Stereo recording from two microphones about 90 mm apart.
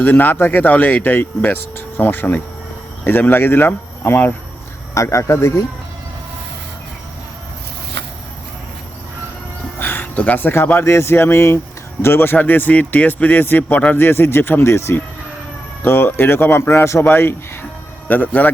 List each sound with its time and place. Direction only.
0.0 s a man's voice: 20° left (ahead or behind)
4.9 s speech: 35° left (ahead or behind)
9.7 s a man's voice: 25° left (ahead or behind)